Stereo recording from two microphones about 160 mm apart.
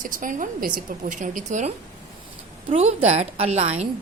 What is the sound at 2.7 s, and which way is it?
A woman's voice, 40° right (ahead or behind).